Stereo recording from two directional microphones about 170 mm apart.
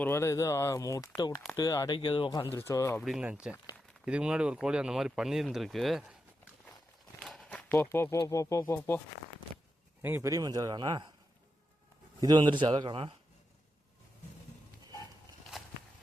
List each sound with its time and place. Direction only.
0.0 s speech: 15° left (ahead or behind); by 2.4 s 30° left (ahead or behind)
2.4 s speech: 15° left (ahead or behind)
3.0 s speech: 5° right (ahead or behind); by 9.0 s 15° left (ahead or behind)
10.0 s speech: 15° right (ahead or behind)
12.2 s speech: 25° right (ahead or behind)